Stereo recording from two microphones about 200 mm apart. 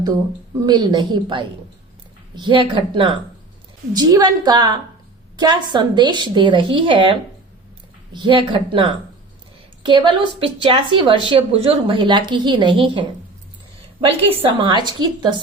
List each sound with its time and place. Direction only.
0.6 s a woman's voice: 20° right (ahead or behind)